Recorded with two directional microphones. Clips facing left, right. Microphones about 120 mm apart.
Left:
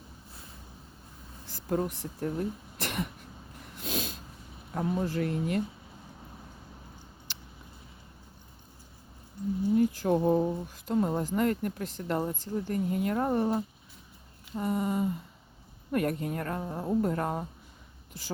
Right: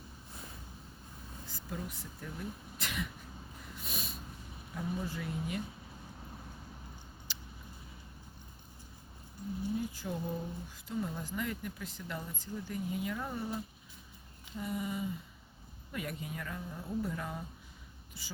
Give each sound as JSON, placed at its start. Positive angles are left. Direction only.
{"t": 1.6, "sound": "speech", "side_deg": 55}
{"t": 3.8, "sound": "snort", "side_deg": 90}
{"t": 4.7, "sound": "speech", "side_deg": 70}
{"t": 9.7, "sound": "speech", "side_deg": 65}
{"t": 14.5, "sound": "a sound", "side_deg": 50}
{"t": 15.9, "sound": "speech", "side_deg": 55}